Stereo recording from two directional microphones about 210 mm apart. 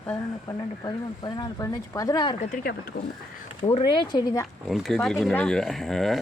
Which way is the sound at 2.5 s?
45° left (ahead or behind).